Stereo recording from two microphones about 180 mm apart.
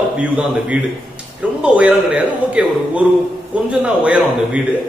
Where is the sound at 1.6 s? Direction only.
5° right (ahead or behind).